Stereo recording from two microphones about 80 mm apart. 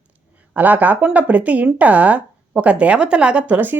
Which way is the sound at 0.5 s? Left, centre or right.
Right.